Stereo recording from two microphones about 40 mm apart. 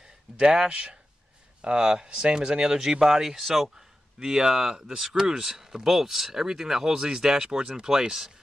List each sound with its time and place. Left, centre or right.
0.0 s speech: centre
3.7 s speech: centre